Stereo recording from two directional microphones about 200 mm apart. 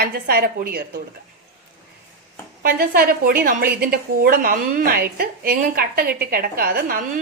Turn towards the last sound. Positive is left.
turn(degrees=-45)  # may be behind; listen again after turning